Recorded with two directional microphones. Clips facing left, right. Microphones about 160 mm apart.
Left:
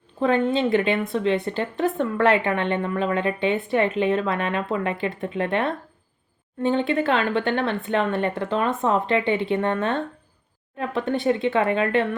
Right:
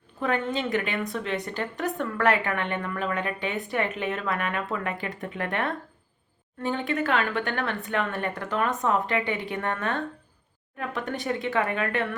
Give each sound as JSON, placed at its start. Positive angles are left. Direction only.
{"t": 0.2, "sound": "a woman's voice", "side_deg": 25}